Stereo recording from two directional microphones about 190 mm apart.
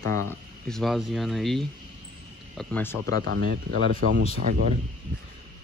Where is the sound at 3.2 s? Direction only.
60° right (ahead or behind).